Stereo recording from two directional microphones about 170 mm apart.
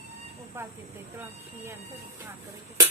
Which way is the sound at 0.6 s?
15° right (ahead or behind).